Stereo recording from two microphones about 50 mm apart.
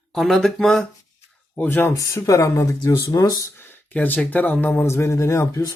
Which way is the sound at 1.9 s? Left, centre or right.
Left.